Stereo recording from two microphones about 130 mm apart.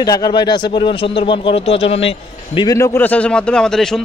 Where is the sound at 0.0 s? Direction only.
30° left (ahead or behind); by 2.6 s 45° left (ahead or behind).